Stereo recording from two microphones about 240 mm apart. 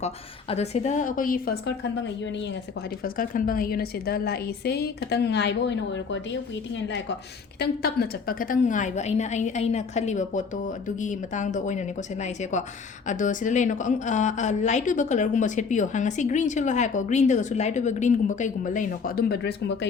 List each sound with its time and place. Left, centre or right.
0.0 s a woman's voice: left
2.2 s a woman's voice: left
3.0 s a woman's voice: left